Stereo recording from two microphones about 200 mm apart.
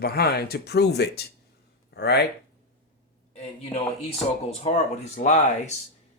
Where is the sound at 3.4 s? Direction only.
30° left (ahead or behind).